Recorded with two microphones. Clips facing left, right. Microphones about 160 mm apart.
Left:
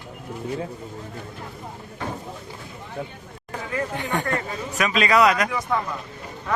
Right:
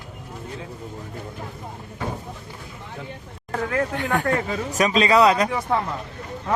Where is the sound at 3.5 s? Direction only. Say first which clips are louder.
Right 4 dB; 65° right (ahead or behind).